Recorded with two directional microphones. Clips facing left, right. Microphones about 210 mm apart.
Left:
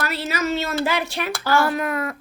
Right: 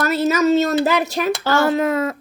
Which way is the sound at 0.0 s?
45° right (ahead or behind).